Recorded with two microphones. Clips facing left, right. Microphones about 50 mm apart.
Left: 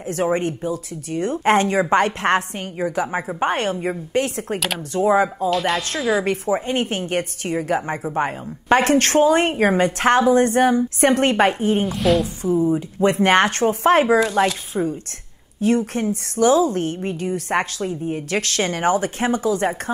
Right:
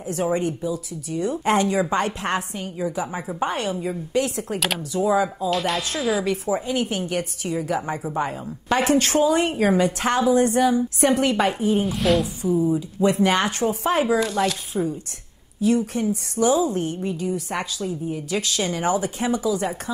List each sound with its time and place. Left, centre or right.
0.0 s a woman's voice: left
5.5 s a woman's voice: centre
6.2 s a woman's voice: left
11.9 s a woman's voice: centre
12.7 s a woman's voice: left
14.7 s a woman's voice: left
15.6 s a woman's voice: left